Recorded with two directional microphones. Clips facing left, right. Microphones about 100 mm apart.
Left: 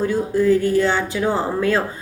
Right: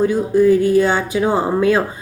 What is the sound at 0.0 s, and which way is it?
A woman's voice, 15° right (ahead or behind).